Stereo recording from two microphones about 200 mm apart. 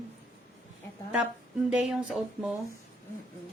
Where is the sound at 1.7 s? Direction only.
5° right (ahead or behind).